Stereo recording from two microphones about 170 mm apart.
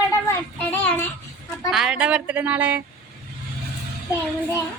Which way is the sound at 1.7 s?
5° right (ahead or behind).